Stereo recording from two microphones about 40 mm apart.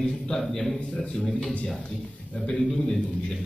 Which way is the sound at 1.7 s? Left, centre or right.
Centre.